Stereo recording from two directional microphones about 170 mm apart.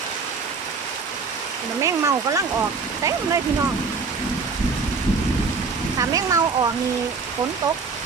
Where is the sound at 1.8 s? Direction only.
20° right (ahead or behind).